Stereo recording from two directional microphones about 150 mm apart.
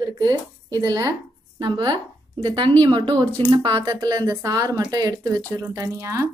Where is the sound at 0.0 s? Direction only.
25° right (ahead or behind).